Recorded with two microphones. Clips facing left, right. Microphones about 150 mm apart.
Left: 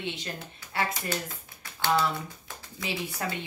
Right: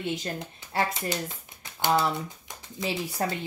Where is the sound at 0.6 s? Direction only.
25° right (ahead or behind).